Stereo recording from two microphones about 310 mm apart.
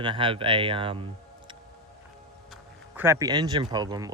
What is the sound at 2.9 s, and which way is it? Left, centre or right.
Speech, centre.